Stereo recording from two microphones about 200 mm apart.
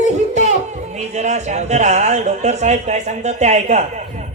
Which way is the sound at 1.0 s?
35° right (ahead or behind).